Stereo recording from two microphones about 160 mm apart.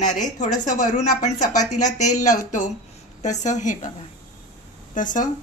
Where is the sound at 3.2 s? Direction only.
45° left (ahead or behind).